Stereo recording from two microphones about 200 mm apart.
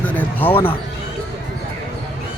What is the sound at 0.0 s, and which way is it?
Basketball bounce, 10° left (ahead or behind).